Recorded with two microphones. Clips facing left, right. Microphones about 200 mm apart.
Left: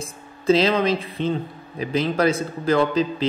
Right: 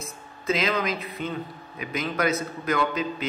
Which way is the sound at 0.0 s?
30° left (ahead or behind).